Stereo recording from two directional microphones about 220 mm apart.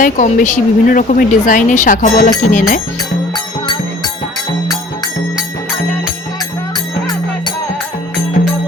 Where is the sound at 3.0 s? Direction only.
20° left (ahead or behind).